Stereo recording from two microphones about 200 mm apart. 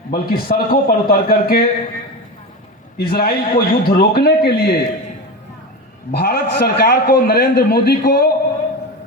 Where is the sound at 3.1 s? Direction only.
50° left (ahead or behind).